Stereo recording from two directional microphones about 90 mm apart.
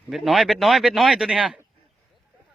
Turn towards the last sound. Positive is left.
turn(degrees=-5)  # may be behind; listen again after turning